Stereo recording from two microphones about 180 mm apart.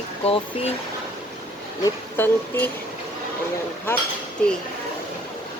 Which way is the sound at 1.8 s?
10° left (ahead or behind).